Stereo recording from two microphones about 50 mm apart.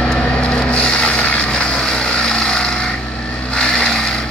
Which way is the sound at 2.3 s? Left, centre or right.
Centre.